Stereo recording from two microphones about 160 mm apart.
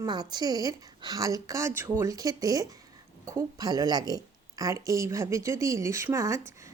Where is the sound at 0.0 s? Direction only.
25° right (ahead or behind).